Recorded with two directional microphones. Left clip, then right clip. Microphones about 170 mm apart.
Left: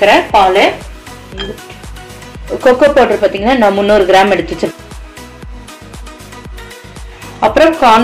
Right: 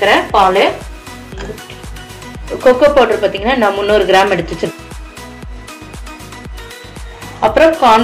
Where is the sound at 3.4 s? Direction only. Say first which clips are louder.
Left 4 dB; 25° left (ahead or behind).